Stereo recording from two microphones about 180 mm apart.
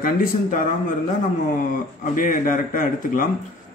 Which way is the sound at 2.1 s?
50° left (ahead or behind).